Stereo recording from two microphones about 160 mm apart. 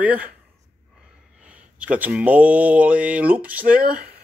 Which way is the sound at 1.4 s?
10° right (ahead or behind).